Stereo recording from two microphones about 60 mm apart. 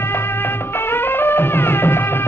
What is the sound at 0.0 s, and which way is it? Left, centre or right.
Music, left.